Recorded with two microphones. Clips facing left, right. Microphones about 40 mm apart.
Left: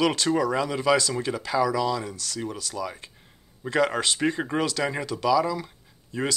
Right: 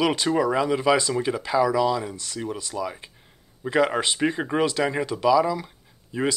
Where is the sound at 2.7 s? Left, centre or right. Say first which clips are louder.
Right 2 dB; centre.